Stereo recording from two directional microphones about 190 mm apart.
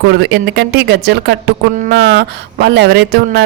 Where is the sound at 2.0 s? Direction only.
65° right (ahead or behind).